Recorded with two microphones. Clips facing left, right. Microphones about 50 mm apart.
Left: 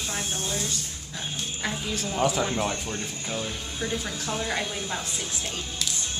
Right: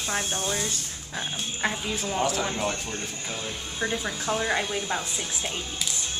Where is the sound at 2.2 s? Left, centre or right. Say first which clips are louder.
Left 3 dB; centre.